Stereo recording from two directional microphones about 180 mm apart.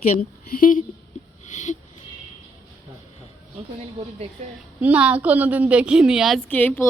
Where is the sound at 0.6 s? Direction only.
50° left (ahead or behind).